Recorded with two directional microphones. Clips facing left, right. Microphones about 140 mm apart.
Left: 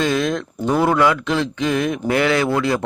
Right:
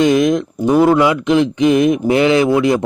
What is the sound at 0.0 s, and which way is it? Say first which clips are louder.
Speech: right 7 dB; 15° right (ahead or behind).